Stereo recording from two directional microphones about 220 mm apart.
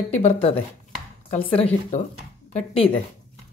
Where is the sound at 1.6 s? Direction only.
30° left (ahead or behind).